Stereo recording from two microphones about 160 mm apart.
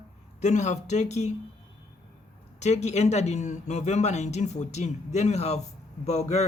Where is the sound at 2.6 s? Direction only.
45° left (ahead or behind).